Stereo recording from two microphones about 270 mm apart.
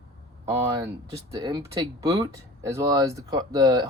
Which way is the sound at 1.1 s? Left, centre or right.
Centre.